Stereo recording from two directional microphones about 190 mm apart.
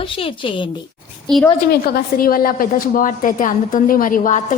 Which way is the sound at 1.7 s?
55° left (ahead or behind).